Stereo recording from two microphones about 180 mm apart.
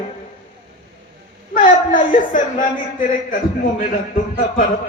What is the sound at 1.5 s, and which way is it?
A man's voice, 50° left (ahead or behind).